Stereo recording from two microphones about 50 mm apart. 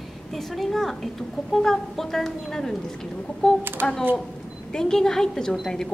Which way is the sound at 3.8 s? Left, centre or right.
Right.